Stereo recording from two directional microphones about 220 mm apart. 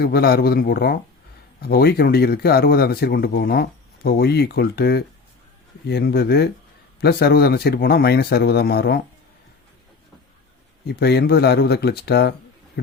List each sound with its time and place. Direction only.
0.0 s speech: 45° left (ahead or behind)
10.8 s speech: 50° left (ahead or behind)